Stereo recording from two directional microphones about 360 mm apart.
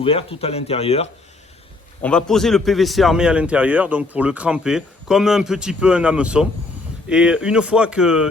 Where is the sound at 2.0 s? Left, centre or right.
Centre.